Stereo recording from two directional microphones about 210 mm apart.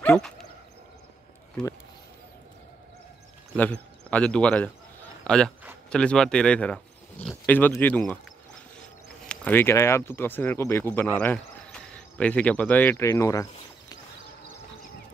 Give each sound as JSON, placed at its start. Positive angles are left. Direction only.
{"t": 0.0, "sound": "bow-wow", "side_deg": 5}
{"t": 4.1, "sound": "speech", "side_deg": 5}
{"t": 9.2, "sound": "speech", "side_deg": 5}